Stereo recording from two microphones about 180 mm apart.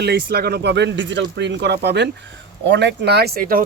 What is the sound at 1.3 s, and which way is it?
A man's voice, 75° right (ahead or behind).